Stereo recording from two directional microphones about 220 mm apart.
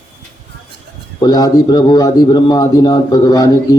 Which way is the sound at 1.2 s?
20° left (ahead or behind).